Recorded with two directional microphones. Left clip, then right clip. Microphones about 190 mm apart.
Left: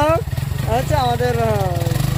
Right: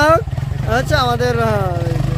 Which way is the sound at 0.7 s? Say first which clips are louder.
Right 2 dB; 25° right (ahead or behind).